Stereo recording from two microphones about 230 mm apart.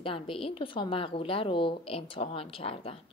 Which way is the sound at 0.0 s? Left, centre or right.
Left.